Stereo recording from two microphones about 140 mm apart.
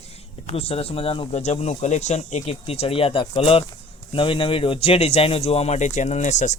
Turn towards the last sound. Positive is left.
turn(degrees=60)  # may be behind; listen again after turning